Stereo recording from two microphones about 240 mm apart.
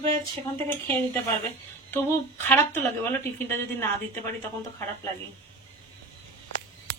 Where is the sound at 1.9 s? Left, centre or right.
Centre.